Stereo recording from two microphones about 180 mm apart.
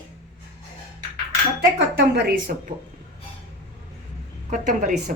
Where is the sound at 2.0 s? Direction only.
60° right (ahead or behind).